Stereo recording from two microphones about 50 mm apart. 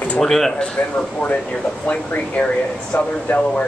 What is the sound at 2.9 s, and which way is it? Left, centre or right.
Speech, left.